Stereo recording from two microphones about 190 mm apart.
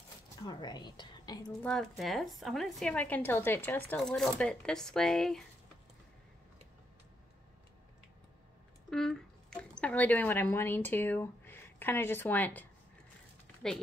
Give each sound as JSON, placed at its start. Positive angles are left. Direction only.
{"t": 0.4, "sound": "a woman's voice", "side_deg": 20}
{"t": 1.6, "sound": "a woman's voice", "side_deg": 5}
{"t": 8.9, "sound": "speech", "side_deg": 5}